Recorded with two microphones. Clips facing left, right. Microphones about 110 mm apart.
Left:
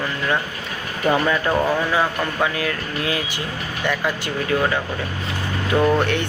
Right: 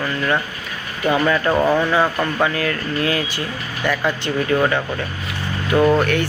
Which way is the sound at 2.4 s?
10° left (ahead or behind).